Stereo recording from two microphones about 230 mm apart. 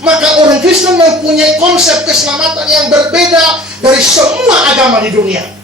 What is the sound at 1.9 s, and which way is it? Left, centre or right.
A woman's voice, centre.